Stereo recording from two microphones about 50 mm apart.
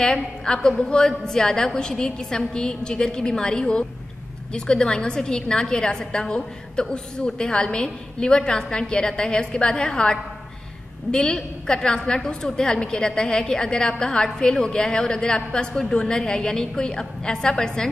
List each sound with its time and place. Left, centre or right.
0.0 s a woman's voice: centre